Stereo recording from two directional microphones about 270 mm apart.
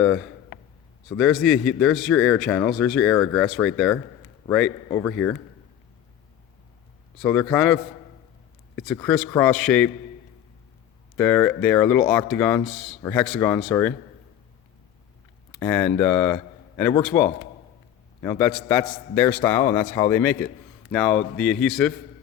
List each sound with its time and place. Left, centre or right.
1.1 s a man's voice: centre
7.2 s a man's voice: centre
8.8 s a man's voice: centre
11.2 s a man's voice: centre
15.5 s a man's voice: centre